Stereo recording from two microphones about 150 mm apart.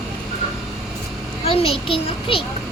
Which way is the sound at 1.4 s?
40° left (ahead or behind).